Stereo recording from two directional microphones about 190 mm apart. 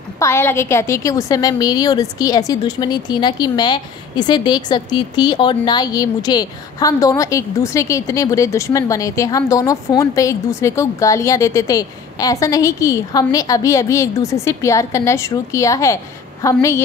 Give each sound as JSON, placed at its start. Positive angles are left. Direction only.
{"t": 0.2, "sound": "a woman's voice", "side_deg": 15}